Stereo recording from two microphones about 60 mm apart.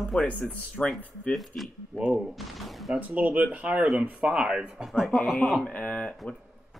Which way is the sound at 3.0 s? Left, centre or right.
Right.